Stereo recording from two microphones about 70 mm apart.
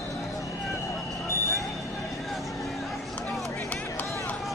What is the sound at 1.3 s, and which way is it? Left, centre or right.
Vehicle, left.